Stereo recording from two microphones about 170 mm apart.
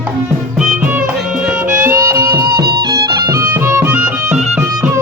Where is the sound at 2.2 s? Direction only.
65° right (ahead or behind).